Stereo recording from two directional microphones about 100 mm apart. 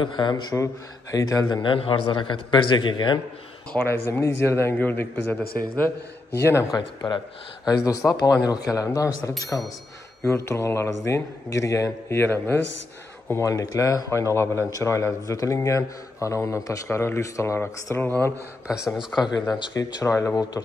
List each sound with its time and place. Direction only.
0.0 s a man's voice: 50° left (ahead or behind)
1.1 s speech: 35° left (ahead or behind)
1.6 s a man's voice: 60° left (ahead or behind)
3.9 s a man's voice: 25° left (ahead or behind)
7.0 s speech: 60° left (ahead or behind)
7.6 s a man's voice: 35° left (ahead or behind)
18.0 s a man's voice: 20° left (ahead or behind)
20.0 s a man's voice: 30° left (ahead or behind)